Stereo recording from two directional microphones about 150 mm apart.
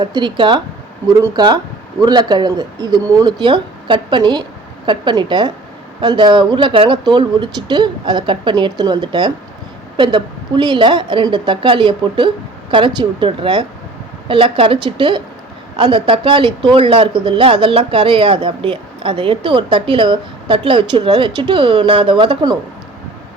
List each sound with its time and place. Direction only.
0.0 s speech: 30° right (ahead or behind)